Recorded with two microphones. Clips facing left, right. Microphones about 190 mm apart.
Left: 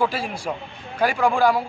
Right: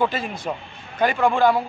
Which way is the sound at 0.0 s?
5° left (ahead or behind).